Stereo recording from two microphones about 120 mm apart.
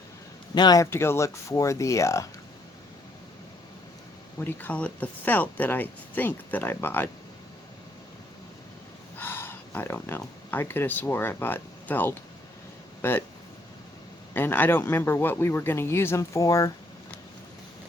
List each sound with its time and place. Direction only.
0.5 s speech: 35° left (ahead or behind)
0.9 s speech: 20° left (ahead or behind)
4.4 s speech: 15° left (ahead or behind)
9.1 s speech: 15° left (ahead or behind)
14.3 s speech: 15° left (ahead or behind)